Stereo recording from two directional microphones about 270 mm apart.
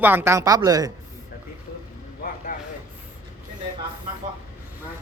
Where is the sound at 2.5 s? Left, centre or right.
Left.